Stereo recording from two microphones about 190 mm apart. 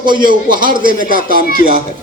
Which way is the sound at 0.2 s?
45° right (ahead or behind).